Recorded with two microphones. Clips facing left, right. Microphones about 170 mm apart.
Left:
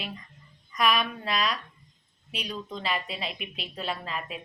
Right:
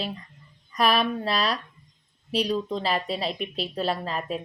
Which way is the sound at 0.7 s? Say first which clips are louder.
Right 4 dB; 35° right (ahead or behind).